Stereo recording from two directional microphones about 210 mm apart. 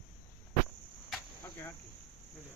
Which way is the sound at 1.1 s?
5° left (ahead or behind).